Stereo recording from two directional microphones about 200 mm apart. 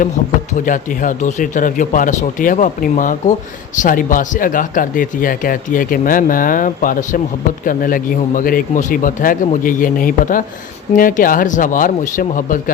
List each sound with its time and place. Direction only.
0.5 s speech: 40° left (ahead or behind)